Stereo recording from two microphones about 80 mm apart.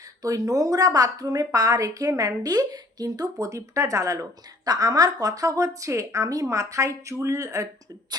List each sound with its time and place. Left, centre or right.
0.2 s a woman's voice: right